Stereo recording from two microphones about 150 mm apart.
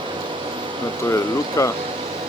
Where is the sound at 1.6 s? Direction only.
20° left (ahead or behind).